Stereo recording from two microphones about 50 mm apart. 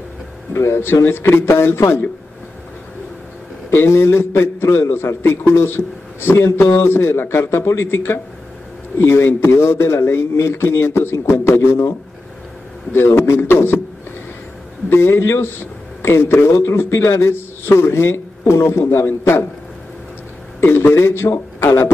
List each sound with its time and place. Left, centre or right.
0.5 s a man's voice: left
3.7 s a man's voice: left
12.9 s a man's voice: left
14.9 s a man's voice: left
20.6 s a man's voice: left